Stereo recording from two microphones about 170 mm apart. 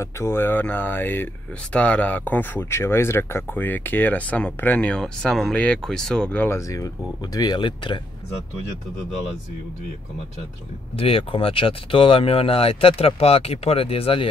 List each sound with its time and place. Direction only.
0.0 s speech: 15° left (ahead or behind)
11.0 s speech: 30° left (ahead or behind)